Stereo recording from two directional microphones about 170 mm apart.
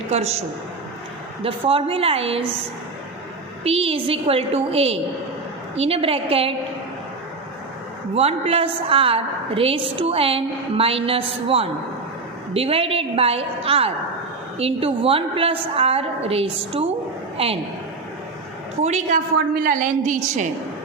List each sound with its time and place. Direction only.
0.1 s a woman's voice: 40° right (ahead or behind)
8.1 s a woman's voice: 35° right (ahead or behind)
18.8 s a woman's voice: 40° right (ahead or behind)